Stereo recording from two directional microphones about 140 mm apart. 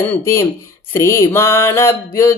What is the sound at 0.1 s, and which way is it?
Speech, 20° left (ahead or behind).